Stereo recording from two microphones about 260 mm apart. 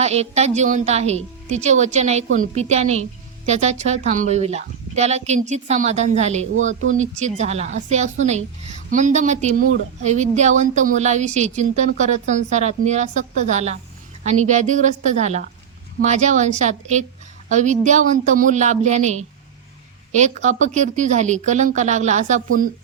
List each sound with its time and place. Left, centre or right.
0.0 s a woman's voice: right